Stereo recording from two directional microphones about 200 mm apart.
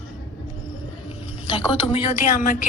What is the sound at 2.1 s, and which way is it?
Speech, 40° left (ahead or behind).